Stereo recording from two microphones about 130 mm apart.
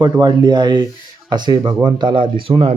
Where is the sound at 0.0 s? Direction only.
35° right (ahead or behind).